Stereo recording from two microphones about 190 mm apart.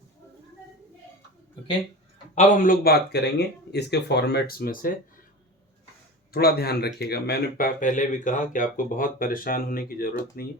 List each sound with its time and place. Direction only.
2.3 s speech: 40° left (ahead or behind)
6.3 s speech: 55° left (ahead or behind)